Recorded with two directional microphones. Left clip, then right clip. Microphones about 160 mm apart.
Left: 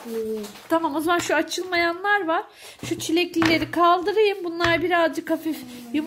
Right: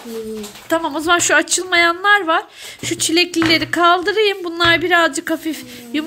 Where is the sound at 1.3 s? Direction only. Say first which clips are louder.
Right 8 dB; centre (ahead or behind).